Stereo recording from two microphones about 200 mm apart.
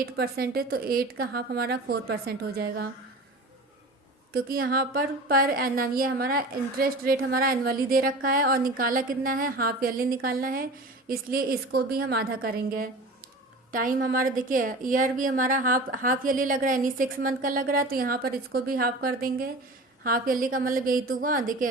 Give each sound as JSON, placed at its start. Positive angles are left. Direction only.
{"t": 0.0, "sound": "a woman's voice", "side_deg": -50}
{"t": 4.3, "sound": "a woman's voice", "side_deg": -50}